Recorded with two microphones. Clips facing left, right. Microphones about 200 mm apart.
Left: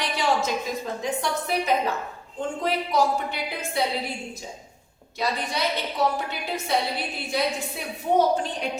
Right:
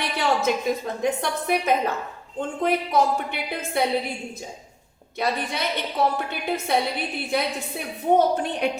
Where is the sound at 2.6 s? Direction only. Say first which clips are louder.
Right 2 dB; 55° right (ahead or behind).